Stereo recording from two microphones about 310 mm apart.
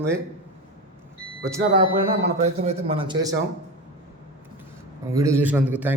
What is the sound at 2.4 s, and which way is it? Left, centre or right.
Speech, right.